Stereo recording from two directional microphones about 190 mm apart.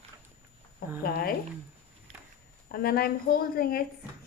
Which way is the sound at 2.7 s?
50° left (ahead or behind).